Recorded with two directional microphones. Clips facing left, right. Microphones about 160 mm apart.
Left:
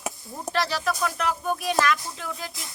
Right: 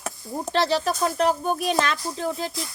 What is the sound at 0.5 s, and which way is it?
Speech, 25° right (ahead or behind).